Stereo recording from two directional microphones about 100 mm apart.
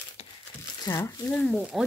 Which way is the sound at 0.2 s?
90° left.